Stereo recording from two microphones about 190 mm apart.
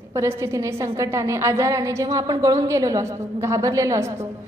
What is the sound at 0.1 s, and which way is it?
A woman's voice, 15° right (ahead or behind).